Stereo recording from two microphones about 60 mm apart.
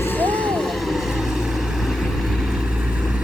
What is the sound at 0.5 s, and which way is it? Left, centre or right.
Vehicle, centre.